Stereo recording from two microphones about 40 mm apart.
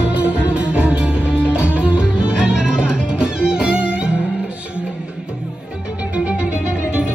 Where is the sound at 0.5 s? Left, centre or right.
Right.